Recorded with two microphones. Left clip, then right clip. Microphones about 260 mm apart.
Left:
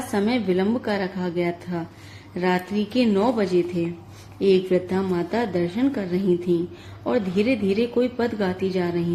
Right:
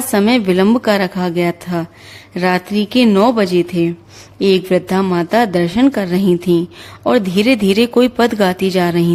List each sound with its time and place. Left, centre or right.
0.1 s a woman's voice: right